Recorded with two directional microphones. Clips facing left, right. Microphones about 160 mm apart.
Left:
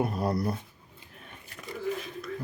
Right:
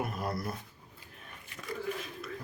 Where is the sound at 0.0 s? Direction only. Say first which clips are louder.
Left 7 dB; 30° left (ahead or behind).